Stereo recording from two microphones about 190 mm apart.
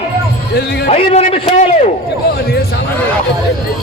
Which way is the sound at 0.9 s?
35° left (ahead or behind).